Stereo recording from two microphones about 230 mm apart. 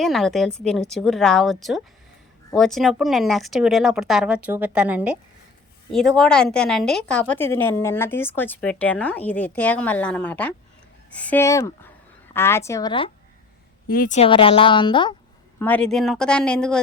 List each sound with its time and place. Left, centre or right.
0.0 s a woman's voice: centre
13.8 s a woman's voice: left; by 15.1 s centre
15.5 s speech: centre